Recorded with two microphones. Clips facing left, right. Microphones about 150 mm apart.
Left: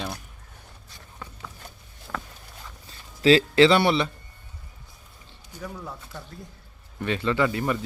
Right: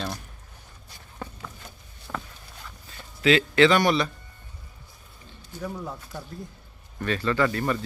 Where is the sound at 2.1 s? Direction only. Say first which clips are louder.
Even; 10° right (ahead or behind).